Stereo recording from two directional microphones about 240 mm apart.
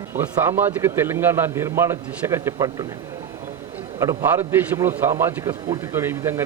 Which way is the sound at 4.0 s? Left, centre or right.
Centre.